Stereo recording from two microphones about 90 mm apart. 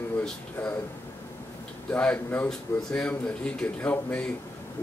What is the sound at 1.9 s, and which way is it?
Speech, 20° left (ahead or behind).